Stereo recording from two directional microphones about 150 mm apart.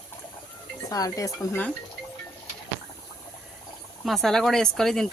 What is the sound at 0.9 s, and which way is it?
Speech, 25° left (ahead or behind).